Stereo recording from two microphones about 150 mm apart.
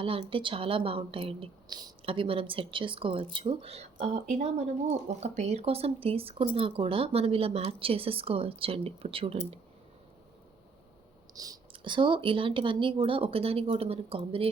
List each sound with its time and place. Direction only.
0.0 s a woman's voice: 35° right (ahead or behind)
11.3 s a woman's voice: 25° right (ahead or behind)